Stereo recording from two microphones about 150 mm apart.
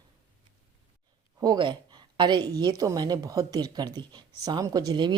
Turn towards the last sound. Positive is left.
turn(degrees=-30)  # may be behind; listen again after turning